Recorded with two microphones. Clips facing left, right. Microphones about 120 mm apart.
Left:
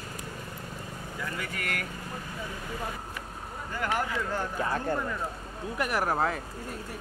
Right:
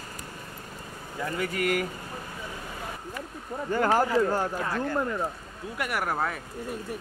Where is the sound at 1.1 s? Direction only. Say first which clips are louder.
Right 7 dB; 30° right (ahead or behind).